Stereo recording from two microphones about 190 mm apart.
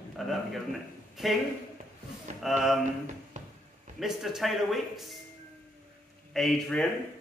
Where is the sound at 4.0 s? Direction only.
Centre (ahead or behind).